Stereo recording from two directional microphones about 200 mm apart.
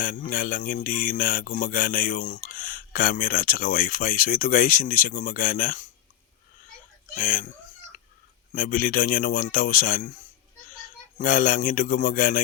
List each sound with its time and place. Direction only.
0.0 s mantra: 45° left (ahead or behind)
7.1 s mantra: 45° left (ahead or behind)
8.5 s mantra: 45° left (ahead or behind)
11.2 s mantra: 45° left (ahead or behind)